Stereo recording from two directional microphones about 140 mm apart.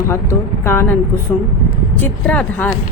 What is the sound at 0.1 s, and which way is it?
Speech, 20° left (ahead or behind).